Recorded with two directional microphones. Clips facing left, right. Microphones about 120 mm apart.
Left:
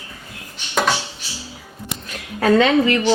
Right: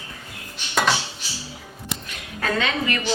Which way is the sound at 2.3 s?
45° left (ahead or behind).